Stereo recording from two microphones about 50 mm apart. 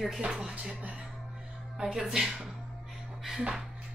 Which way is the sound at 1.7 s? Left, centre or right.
Centre.